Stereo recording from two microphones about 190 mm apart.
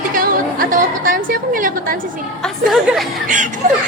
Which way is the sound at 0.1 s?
45° right (ahead or behind).